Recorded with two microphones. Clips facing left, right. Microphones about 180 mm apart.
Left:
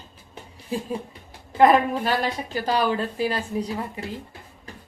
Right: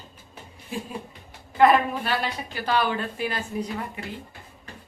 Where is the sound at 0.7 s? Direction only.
35° left (ahead or behind).